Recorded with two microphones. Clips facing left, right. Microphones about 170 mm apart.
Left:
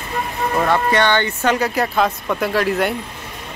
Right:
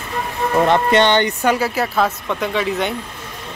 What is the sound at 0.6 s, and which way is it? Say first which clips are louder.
Speech: right 3 dB; 20° right (ahead or behind).